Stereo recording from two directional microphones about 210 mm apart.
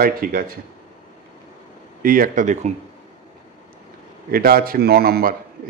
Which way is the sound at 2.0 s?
40° right (ahead or behind).